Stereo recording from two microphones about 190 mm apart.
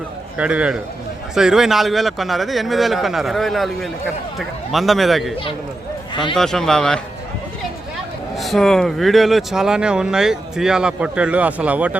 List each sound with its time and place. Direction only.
0.3 s speech: 5° right (ahead or behind)
6.3 s speech: centre (ahead or behind)
8.4 s speech: centre (ahead or behind)